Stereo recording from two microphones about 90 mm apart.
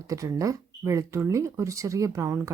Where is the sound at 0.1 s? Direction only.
40° right (ahead or behind).